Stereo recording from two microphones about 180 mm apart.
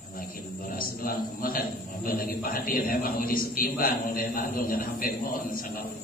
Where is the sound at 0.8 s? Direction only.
50° left (ahead or behind).